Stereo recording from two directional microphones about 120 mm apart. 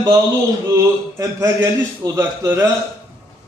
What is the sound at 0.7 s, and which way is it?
A man's voice, 25° right (ahead or behind).